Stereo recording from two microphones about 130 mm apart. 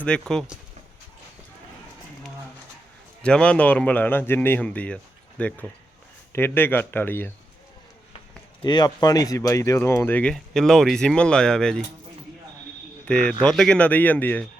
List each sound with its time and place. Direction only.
0.0 s speech: 5° left (ahead or behind)
3.2 s speech: 10° left (ahead or behind)
8.6 s speech: 35° left (ahead or behind); by 11.8 s 5° left (ahead or behind)
13.1 s speech: 10° left (ahead or behind)